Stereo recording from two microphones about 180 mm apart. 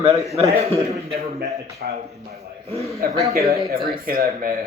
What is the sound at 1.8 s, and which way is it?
Speech, 55° right (ahead or behind).